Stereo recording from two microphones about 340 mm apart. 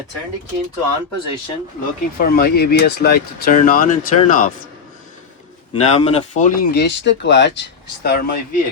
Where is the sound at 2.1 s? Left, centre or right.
Left.